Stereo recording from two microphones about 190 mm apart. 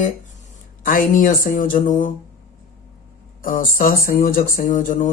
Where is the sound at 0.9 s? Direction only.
45° left (ahead or behind).